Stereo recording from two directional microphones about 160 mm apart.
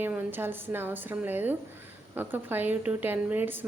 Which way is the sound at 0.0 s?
10° right (ahead or behind).